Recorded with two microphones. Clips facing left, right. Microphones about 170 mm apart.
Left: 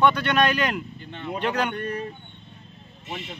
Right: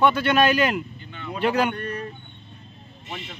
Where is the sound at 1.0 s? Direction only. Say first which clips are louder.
Left 2 dB; 35° left (ahead or behind).